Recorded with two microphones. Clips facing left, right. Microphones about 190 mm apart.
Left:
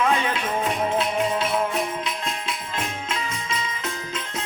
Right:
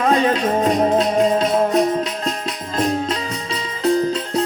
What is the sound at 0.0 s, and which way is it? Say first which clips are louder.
Music: right 7 dB; 40° right (ahead or behind).